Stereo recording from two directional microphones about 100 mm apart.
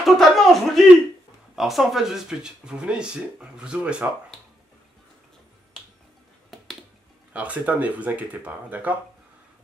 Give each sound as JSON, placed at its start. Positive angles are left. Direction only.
{"t": 0.0, "sound": "a man's voice", "side_deg": 0}
{"t": 7.3, "sound": "speech", "side_deg": -15}